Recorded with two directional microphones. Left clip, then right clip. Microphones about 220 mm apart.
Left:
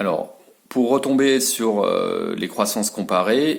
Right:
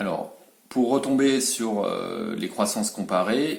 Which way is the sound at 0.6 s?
45° left (ahead or behind).